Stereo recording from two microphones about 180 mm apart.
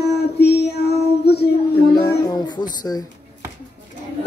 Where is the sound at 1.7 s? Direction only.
15° left (ahead or behind).